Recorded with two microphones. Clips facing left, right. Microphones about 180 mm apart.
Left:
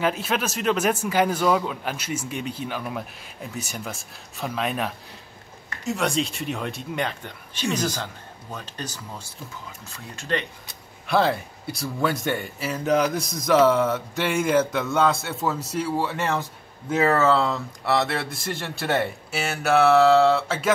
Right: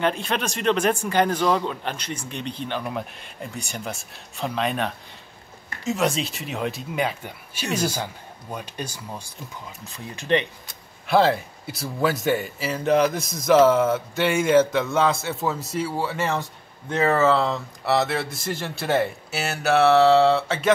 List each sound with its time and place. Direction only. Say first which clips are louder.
0.0 s a man's voice: even; 5° left (ahead or behind); by 10.4 s 20° right (ahead or behind)
11.1 s a man's voice: right 3 dB; centre (ahead or behind)